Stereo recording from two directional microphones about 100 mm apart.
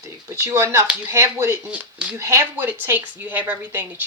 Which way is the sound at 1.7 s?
15° right (ahead or behind).